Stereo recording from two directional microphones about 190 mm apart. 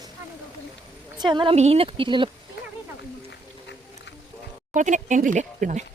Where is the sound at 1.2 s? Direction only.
25° right (ahead or behind).